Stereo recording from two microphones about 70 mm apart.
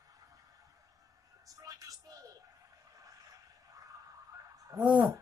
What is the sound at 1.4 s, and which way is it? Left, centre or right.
Music, right.